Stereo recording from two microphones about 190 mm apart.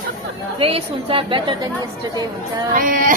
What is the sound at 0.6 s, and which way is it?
Speech, 30° right (ahead or behind).